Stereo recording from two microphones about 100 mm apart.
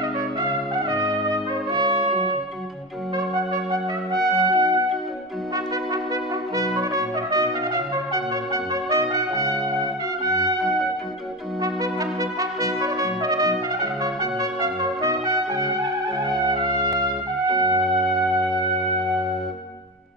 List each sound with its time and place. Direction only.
0.8 s trumpet: 35° right (ahead or behind)
1.7 s brass instrument: 40° right (ahead or behind)
4.1 s music: 45° right (ahead or behind)
6.5 s brass instrument: 35° right (ahead or behind)
8.9 s trumpet: 35° right (ahead or behind)
11.6 s brass instrument: 35° right (ahead or behind)
14.0 s trumpet: 35° right (ahead or behind)
17.6 s music: 50° right (ahead or behind)